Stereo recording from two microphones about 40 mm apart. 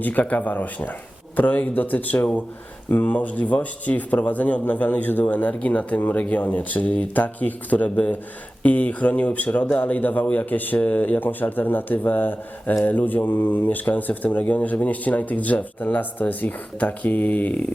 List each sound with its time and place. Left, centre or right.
0.0 s a man's voice: left
13.2 s speech: left